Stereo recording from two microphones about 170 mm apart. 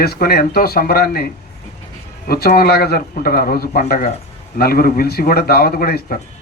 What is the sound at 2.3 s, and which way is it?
Speech, 65° left (ahead or behind).